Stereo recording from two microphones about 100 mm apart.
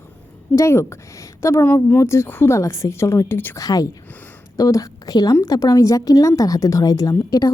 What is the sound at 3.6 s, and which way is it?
A woman's voice, 35° left (ahead or behind).